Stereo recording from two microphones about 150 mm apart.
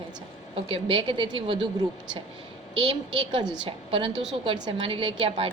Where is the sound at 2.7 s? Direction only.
35° right (ahead or behind).